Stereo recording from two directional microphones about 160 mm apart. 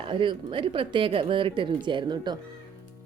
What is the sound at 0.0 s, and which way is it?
Speech, 30° right (ahead or behind).